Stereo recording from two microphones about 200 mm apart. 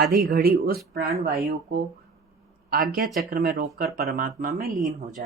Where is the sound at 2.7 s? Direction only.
45° right (ahead or behind).